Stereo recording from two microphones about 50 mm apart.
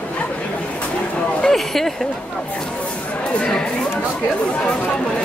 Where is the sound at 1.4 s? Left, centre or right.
Centre.